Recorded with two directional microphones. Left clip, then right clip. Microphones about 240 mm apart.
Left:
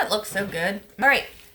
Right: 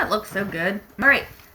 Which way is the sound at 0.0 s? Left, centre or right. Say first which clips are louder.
Right 1 dB; left.